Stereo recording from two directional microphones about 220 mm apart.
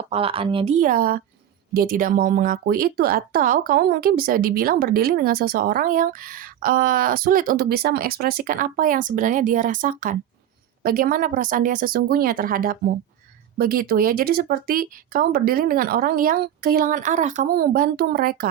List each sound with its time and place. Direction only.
0.1 s speech: 25° right (ahead or behind); by 18.4 s 40° right (ahead or behind)